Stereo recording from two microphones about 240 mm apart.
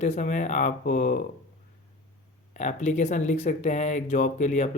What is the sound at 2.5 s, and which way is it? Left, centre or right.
Speech, left.